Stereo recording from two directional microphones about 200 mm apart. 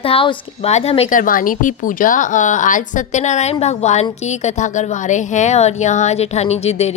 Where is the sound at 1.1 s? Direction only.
45° left (ahead or behind).